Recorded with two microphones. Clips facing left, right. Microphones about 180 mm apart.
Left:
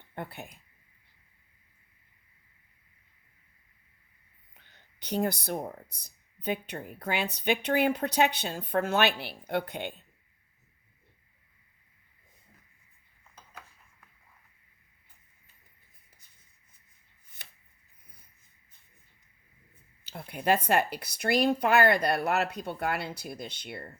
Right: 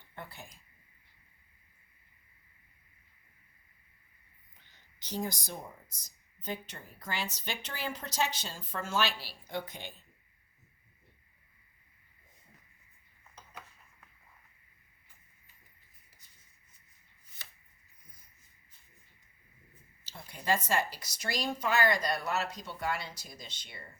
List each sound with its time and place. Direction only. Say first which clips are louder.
0.1 s speech: left 7 dB; 60° left (ahead or behind)
4.5 s speech: left 5 dB; 60° left (ahead or behind)
20.1 s speech: left 5 dB; 60° left (ahead or behind)